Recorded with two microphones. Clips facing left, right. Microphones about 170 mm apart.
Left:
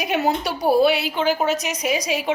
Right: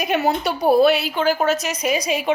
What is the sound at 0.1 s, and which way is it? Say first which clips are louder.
A woman's voice: right 1 dB; 10° left (ahead or behind).